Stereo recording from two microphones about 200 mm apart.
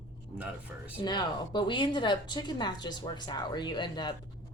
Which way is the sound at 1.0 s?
20° left (ahead or behind).